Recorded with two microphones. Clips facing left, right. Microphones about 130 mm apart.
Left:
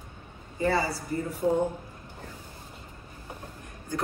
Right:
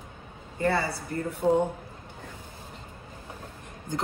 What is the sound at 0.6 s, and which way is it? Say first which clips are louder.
Speech: even; 60° right (ahead or behind).